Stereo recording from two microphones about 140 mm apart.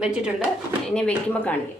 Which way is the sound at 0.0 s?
5° right (ahead or behind).